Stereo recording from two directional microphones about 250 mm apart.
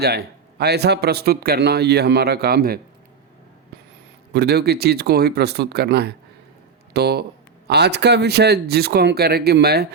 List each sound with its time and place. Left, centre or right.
0.0 s a man's voice: right
4.3 s a man's voice: right